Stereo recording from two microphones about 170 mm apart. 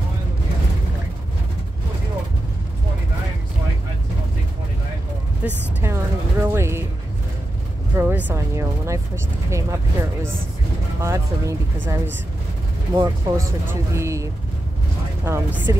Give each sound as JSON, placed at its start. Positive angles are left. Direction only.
{"t": 5.4, "sound": "speech", "side_deg": -10}
{"t": 5.8, "sound": "vehicle", "side_deg": -15}
{"t": 7.9, "sound": "speech", "side_deg": -10}
{"t": 15.2, "sound": "speech", "side_deg": -15}